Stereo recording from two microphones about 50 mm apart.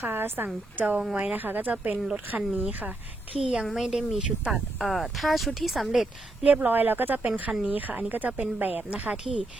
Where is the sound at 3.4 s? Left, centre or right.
Centre.